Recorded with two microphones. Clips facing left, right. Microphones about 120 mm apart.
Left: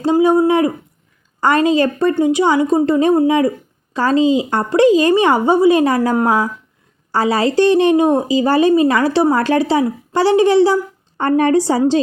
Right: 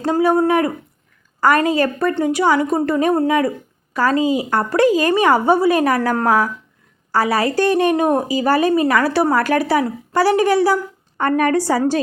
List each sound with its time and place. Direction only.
0.0 s a woman's voice: 20° left (ahead or behind)